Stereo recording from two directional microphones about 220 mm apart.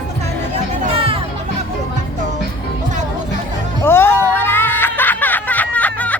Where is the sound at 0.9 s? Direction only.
25° right (ahead or behind).